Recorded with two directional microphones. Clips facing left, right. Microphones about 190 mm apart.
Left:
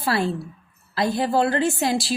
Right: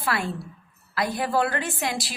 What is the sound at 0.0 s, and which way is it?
A woman's voice, 30° left (ahead or behind).